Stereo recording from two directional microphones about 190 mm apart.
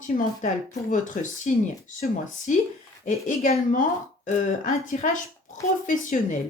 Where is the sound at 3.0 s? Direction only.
40° left (ahead or behind).